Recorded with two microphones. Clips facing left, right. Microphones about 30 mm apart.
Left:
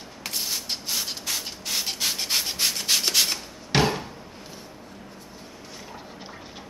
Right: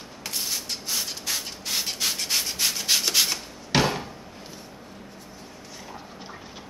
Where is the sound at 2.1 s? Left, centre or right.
Centre.